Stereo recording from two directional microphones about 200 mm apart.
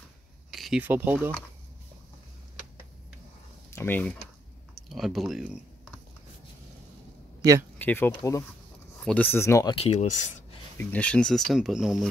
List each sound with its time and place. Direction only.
0.5 s speech: centre (ahead or behind)
3.7 s speech: 10° left (ahead or behind)
7.8 s speech: 10° left (ahead or behind)
9.8 s speech: 35° left (ahead or behind)
10.8 s speech: 10° left (ahead or behind)